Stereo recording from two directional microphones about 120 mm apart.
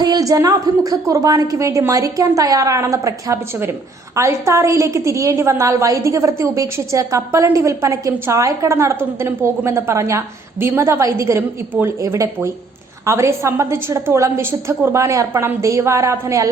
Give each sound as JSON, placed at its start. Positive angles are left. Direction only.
{"t": 0.0, "sound": "a woman's voice", "side_deg": -30}